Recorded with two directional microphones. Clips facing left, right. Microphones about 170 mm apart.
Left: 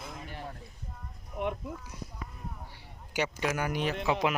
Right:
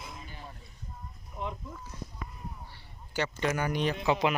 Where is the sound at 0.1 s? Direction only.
65° left (ahead or behind).